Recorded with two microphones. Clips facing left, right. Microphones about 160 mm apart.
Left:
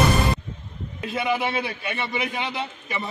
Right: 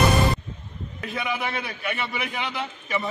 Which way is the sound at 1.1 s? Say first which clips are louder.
Left 5 dB; 25° left (ahead or behind).